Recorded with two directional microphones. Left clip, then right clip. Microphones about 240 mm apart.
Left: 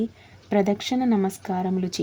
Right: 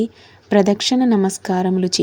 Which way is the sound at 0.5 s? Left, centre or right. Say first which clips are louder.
Right 7 dB; centre.